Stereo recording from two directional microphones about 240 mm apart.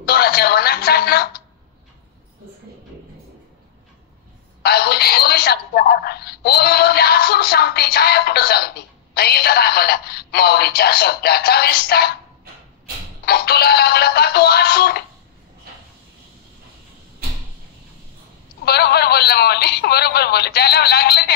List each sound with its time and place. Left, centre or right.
0.0 s music: left
4.6 s a woman's voice: left
13.2 s a woman's voice: left
18.7 s a woman's voice: left